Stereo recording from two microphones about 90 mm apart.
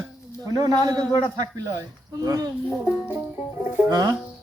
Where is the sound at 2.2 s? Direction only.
45° right (ahead or behind).